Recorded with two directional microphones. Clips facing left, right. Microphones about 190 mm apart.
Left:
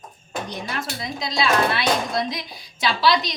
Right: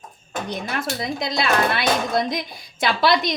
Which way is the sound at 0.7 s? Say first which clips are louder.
Right 7 dB; 55° right (ahead or behind).